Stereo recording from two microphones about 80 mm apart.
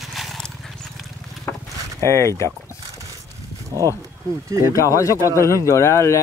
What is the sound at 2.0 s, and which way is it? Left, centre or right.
Speech, left.